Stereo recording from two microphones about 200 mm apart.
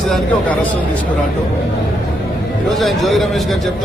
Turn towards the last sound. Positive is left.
turn(degrees=0)  # may be behind; listen again after turning